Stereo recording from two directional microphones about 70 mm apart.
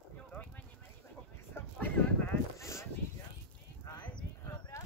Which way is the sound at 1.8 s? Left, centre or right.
Left.